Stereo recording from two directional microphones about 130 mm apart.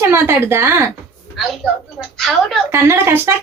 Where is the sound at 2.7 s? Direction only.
20° right (ahead or behind).